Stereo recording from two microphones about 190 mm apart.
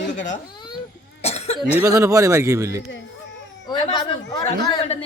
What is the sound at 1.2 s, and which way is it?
Cough, 35° left (ahead or behind).